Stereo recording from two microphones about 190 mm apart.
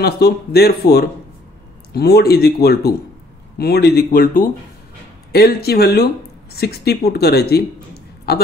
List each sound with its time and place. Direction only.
0.0 s a man's voice: 55° left (ahead or behind)